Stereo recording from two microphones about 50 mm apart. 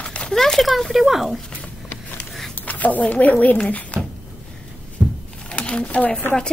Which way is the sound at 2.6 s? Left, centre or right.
Left.